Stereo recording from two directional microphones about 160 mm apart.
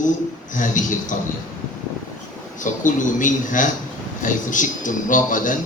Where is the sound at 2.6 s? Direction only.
55° left (ahead or behind).